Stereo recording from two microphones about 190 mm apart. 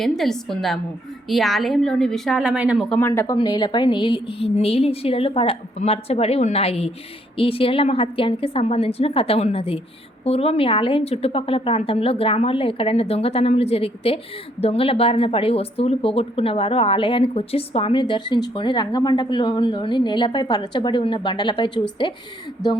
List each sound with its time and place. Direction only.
0.0 s a woman's voice: centre (ahead or behind)
2.9 s a woman's voice: 10° left (ahead or behind)